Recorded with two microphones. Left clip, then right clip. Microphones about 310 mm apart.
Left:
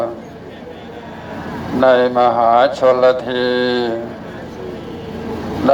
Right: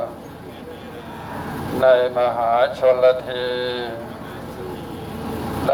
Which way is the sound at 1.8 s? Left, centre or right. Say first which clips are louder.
Left 4 dB; left.